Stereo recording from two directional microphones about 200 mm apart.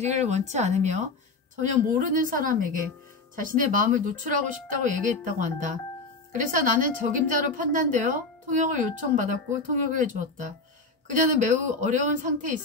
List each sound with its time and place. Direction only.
0.0 s a woman's voice: 35° right (ahead or behind)